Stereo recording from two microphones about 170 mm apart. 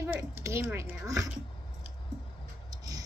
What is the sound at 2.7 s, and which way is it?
Tick-tock, 20° right (ahead or behind).